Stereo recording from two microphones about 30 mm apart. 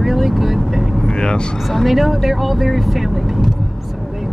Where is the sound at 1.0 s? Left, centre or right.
Left.